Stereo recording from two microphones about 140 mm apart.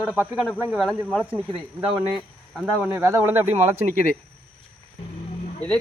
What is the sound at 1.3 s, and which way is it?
Speech, 10° right (ahead or behind).